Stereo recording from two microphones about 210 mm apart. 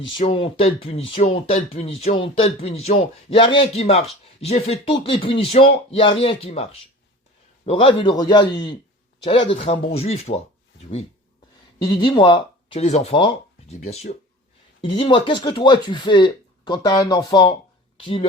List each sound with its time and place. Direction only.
0.1 s speech: 25° left (ahead or behind)
11.8 s speech: 20° left (ahead or behind)